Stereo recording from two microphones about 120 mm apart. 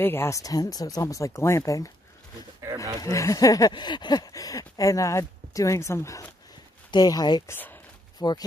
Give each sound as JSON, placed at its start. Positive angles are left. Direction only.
{"t": 0.0, "sound": "speech", "side_deg": 20}
{"t": 3.0, "sound": "speech", "side_deg": 25}
{"t": 7.4, "sound": "speech", "side_deg": 15}
{"t": 8.2, "sound": "speech", "side_deg": 35}